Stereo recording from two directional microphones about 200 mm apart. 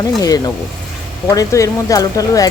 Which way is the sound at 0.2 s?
20° left (ahead or behind).